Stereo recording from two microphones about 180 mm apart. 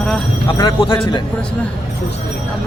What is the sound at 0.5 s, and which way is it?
Speech, 25° left (ahead or behind).